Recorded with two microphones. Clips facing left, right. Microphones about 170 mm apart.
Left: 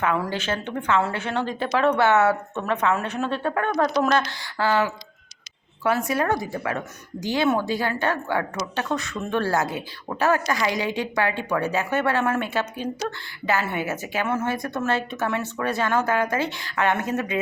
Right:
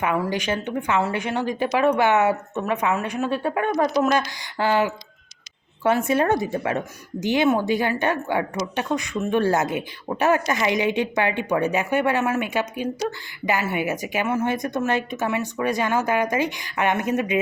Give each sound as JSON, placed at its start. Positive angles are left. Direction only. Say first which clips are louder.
{"t": 0.0, "sound": "a woman's voice", "louder": "right 1 dB", "side_deg": -15}